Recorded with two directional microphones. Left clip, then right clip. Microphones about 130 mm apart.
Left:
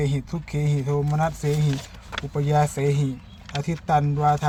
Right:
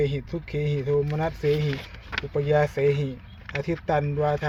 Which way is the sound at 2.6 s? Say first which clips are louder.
Right 2 dB; 20° left (ahead or behind).